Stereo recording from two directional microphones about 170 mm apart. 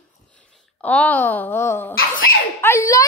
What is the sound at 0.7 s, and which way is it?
Speech, 10° left (ahead or behind).